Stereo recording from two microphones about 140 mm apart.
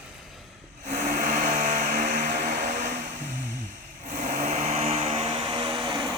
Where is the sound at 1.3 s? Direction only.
55° right (ahead or behind).